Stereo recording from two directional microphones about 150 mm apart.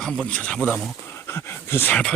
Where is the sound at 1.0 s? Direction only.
15° left (ahead or behind).